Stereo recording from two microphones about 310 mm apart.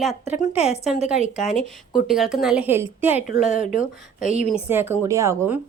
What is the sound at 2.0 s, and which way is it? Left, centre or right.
Speech, centre.